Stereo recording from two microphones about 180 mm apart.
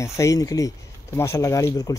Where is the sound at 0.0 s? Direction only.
20° left (ahead or behind).